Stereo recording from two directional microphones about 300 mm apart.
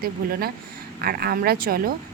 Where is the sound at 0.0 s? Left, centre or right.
Right.